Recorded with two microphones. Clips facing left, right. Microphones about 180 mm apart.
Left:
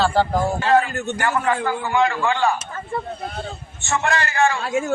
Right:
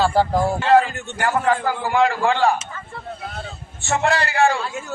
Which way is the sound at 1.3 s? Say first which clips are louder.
Right 3 dB; 35° right (ahead or behind).